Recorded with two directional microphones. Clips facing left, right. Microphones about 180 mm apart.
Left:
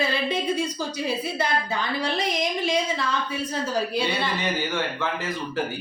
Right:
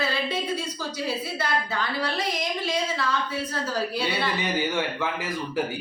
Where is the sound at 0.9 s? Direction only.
20° left (ahead or behind).